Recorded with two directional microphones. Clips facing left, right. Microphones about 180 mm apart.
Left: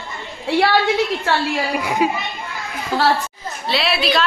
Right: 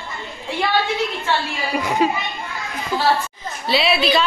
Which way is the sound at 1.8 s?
10° left (ahead or behind).